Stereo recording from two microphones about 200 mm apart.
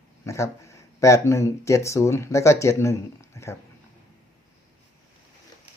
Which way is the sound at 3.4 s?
15° left (ahead or behind).